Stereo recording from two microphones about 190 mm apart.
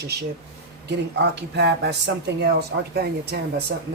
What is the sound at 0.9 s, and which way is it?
Speech, 60° right (ahead or behind).